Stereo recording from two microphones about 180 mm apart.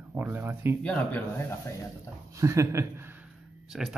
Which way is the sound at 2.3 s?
15° right (ahead or behind).